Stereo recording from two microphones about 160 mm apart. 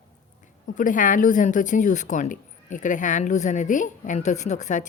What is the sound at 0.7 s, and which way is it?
A woman's voice, 55° left (ahead or behind).